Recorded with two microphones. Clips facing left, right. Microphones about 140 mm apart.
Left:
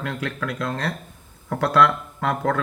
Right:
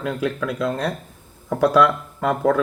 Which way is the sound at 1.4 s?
15° right (ahead or behind).